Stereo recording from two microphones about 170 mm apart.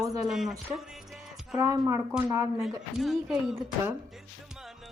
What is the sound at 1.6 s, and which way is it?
Speech, 20° right (ahead or behind).